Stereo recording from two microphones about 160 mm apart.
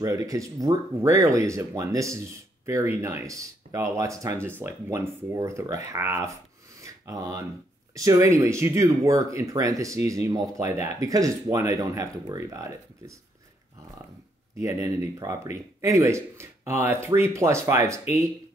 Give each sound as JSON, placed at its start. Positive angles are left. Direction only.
{"t": 0.0, "sound": "speech", "side_deg": -20}
{"t": 6.8, "sound": "a sound", "side_deg": -20}
{"t": 7.9, "sound": "speech", "side_deg": -20}
{"t": 14.6, "sound": "speech", "side_deg": -20}